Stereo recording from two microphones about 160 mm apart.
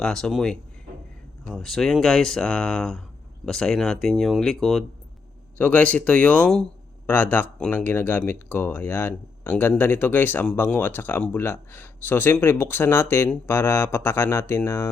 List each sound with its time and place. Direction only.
0.0 s speech: 5° left (ahead or behind)